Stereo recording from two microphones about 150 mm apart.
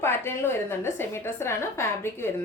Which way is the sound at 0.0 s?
15° left (ahead or behind).